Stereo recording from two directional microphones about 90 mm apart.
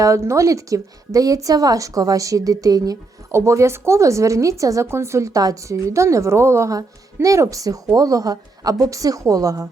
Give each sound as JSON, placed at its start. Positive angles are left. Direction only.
{"t": 0.0, "sound": "a woman's voice", "side_deg": -35}